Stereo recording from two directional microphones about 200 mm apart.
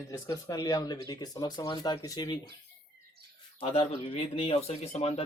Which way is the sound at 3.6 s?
30° left (ahead or behind).